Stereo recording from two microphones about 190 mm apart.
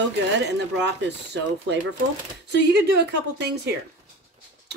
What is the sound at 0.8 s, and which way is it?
Speech, 65° right (ahead or behind).